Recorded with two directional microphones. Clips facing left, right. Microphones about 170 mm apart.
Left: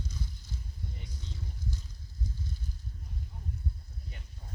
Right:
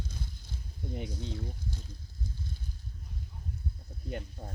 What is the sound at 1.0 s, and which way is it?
Speech, 65° right (ahead or behind).